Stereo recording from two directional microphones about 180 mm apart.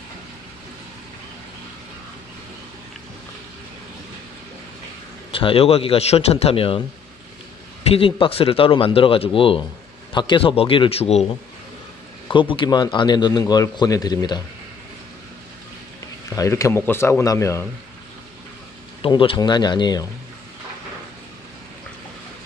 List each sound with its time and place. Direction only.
5.3 s speech: 30° left (ahead or behind)
7.9 s speech: 30° left (ahead or behind)
12.3 s a man's voice: 25° left (ahead or behind)
16.3 s speech: 15° left (ahead or behind)
19.0 s a man's voice: 25° left (ahead or behind)